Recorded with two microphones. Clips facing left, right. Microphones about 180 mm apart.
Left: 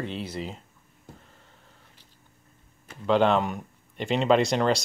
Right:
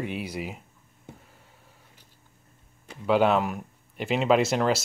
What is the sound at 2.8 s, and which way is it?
Speech, 10° right (ahead or behind).